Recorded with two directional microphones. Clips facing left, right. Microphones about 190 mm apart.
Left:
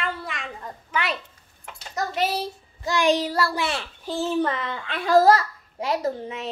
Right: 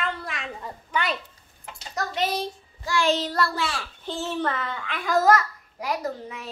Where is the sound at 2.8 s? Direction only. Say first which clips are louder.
Left 3 dB; 15° left (ahead or behind).